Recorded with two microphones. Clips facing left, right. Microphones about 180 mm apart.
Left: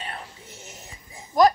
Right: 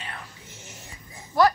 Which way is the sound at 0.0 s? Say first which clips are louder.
Left 3 dB; 30° left (ahead or behind).